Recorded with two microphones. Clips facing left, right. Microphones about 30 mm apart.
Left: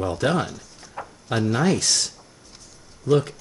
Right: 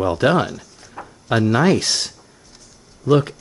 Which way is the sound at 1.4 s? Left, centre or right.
Centre.